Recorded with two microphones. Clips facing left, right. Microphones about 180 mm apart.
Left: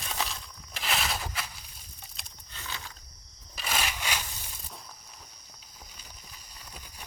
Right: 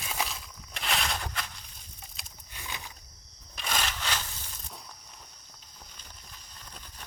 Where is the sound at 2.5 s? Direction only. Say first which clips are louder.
Even; 15° right (ahead or behind).